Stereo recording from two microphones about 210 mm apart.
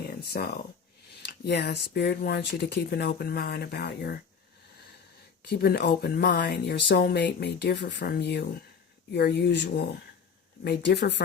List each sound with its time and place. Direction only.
0.0 s a sound: 50° left (ahead or behind)
1.2 s speech: 50° left (ahead or behind)
5.5 s speech: 50° left (ahead or behind)